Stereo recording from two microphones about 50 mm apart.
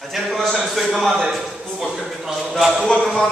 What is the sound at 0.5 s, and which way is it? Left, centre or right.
Speech, centre.